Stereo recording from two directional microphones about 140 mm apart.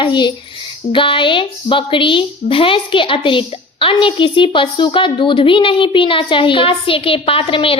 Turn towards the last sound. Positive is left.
turn(degrees=40)  # may be behind; listen again after turning